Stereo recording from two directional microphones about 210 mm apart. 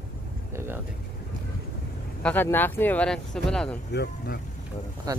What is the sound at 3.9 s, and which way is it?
Speech, 50° left (ahead or behind).